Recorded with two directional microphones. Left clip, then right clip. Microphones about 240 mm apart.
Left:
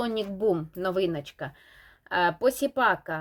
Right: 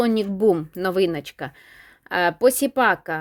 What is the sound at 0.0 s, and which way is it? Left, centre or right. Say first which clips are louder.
A woman's voice: right 8 dB; right.